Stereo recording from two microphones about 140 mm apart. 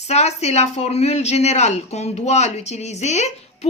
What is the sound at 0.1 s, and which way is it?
Speech, 50° left (ahead or behind).